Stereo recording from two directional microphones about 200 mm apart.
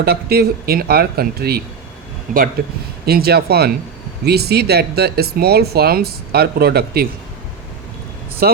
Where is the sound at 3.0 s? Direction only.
50° right (ahead or behind).